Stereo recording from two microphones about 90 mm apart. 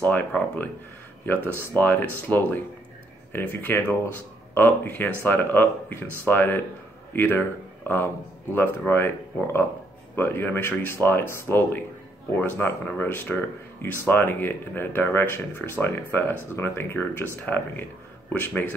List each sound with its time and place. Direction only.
0.0 s speech: 20° left (ahead or behind)